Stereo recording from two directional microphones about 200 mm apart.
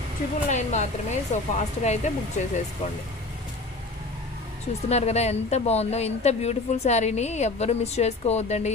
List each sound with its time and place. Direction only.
0.5 s speech: 35° left (ahead or behind)
4.8 s speech: 35° left (ahead or behind)